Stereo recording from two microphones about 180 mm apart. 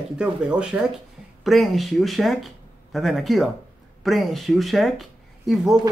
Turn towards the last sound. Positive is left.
turn(degrees=0)  # may be behind; listen again after turning